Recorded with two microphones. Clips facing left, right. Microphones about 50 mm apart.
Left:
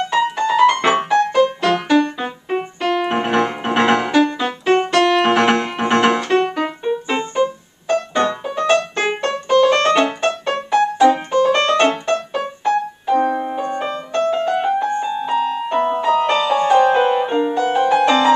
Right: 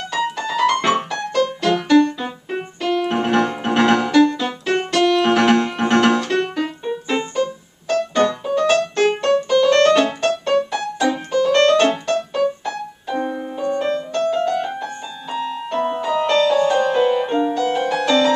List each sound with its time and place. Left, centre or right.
0.1 s music: centre
2.1 s keyboard: left
11.3 s music: centre
11.9 s keyboard: centre
13.3 s music: left
13.8 s keyboard: centre
15.2 s piano: centre
16.5 s music: left